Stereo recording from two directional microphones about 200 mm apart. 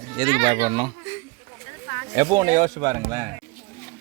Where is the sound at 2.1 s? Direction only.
20° right (ahead or behind).